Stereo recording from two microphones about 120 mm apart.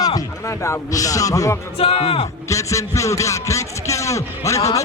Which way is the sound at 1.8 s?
50° left (ahead or behind).